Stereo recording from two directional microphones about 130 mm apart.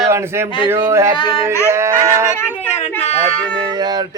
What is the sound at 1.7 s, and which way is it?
Speech, 20° right (ahead or behind).